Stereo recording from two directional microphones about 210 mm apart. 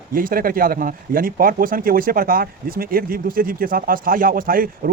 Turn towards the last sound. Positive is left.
turn(degrees=-40)  # may be behind; listen again after turning